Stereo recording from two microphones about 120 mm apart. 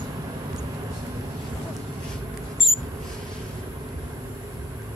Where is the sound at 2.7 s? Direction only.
50° left (ahead or behind).